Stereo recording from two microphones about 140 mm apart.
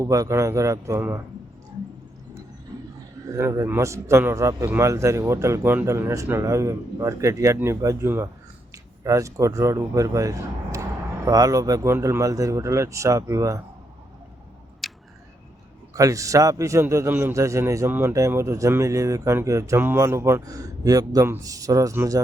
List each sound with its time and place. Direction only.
0.0 s a man's voice: 20° right (ahead or behind)
3.3 s a man's voice: 25° right (ahead or behind)
14.8 s a sound: centre (ahead or behind)
15.9 s a man's voice: 25° right (ahead or behind)